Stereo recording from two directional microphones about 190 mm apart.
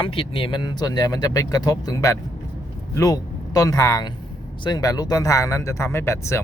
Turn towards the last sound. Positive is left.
turn(degrees=15)  # may be behind; listen again after turning